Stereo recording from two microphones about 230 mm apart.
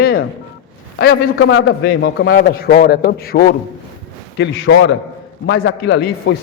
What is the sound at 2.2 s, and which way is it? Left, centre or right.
A man's voice, left.